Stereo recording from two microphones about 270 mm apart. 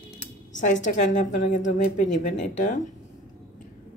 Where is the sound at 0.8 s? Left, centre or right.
Left.